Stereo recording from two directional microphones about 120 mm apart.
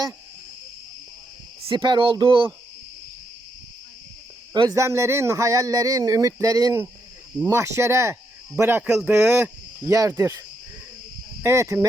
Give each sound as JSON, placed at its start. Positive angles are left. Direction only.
{"t": 1.6, "sound": "speech", "side_deg": -40}
{"t": 4.7, "sound": "speech", "side_deg": -25}
{"t": 11.4, "sound": "speech", "side_deg": -25}